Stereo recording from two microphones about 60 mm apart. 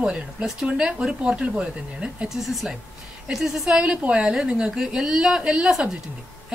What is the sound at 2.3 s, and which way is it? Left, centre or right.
A woman's voice, centre.